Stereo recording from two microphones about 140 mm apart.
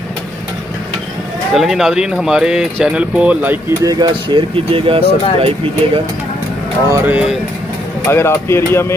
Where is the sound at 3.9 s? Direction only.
30° right (ahead or behind).